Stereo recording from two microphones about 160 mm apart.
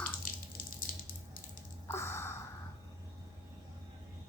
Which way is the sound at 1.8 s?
15° left (ahead or behind).